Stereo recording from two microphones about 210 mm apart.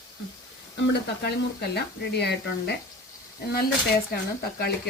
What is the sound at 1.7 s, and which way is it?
A woman's voice, 50° left (ahead or behind).